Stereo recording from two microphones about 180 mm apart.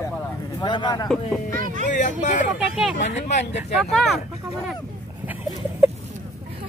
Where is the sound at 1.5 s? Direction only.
45° right (ahead or behind).